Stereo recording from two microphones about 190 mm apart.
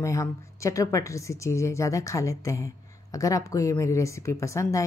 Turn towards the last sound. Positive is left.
turn(degrees=15)  # may be behind; listen again after turning